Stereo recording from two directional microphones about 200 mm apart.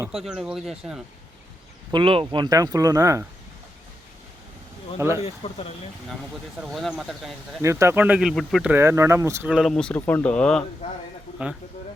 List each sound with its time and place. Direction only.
0.1 s speech: 5° right (ahead or behind)
1.9 s speech: 25° right (ahead or behind)
4.9 s speech: 15° right (ahead or behind)
5.2 s speech: 30° left (ahead or behind)
6.1 s speech: centre (ahead or behind)
7.6 s speech: 15° right (ahead or behind); by 8.7 s centre (ahead or behind)
8.7 s speech: 15° right (ahead or behind); by 10.7 s 5° left (ahead or behind)